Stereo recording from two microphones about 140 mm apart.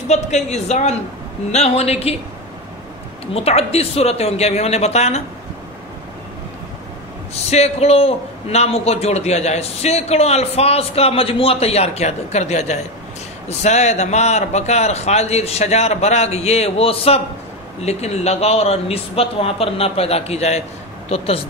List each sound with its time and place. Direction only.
0.1 s a man's voice: 55° left (ahead or behind)
3.3 s a man's voice: 45° left (ahead or behind)
7.4 s a man's voice: 50° left (ahead or behind)